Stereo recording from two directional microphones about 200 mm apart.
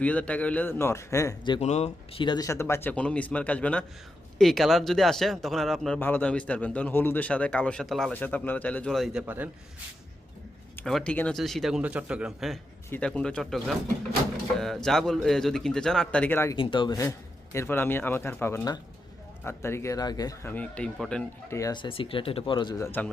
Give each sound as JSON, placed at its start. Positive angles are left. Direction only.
{"t": 0.0, "sound": "speech", "side_deg": 5}
{"t": 1.5, "sound": "speech", "side_deg": 35}
{"t": 10.8, "sound": "speech", "side_deg": 5}
{"t": 14.8, "sound": "speech", "side_deg": 0}
{"t": 16.6, "sound": "speech", "side_deg": 25}
{"t": 21.6, "sound": "speech", "side_deg": 20}